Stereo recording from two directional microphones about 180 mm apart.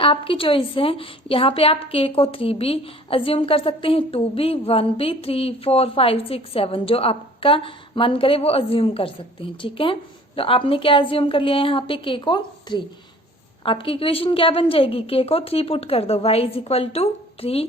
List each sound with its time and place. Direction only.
0.0 s a woman's voice: 30° left (ahead or behind)